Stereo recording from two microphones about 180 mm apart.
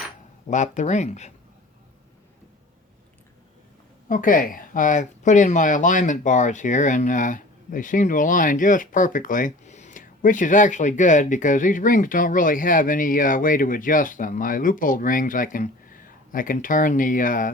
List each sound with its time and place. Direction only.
0.5 s speech: 40° left (ahead or behind)
4.1 s speech: 50° left (ahead or behind)